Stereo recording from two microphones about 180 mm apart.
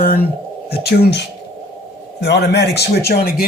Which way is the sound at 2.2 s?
65° left (ahead or behind).